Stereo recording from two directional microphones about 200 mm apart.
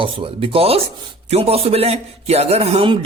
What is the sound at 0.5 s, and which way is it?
A man's voice, 30° right (ahead or behind).